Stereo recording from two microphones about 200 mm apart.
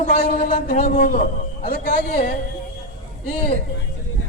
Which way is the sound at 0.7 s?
45° left (ahead or behind).